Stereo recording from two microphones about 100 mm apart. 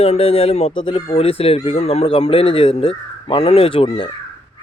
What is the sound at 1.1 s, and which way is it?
A man's voice, 80° left.